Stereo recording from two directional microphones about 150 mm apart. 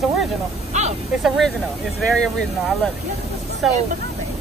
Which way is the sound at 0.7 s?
45° right (ahead or behind).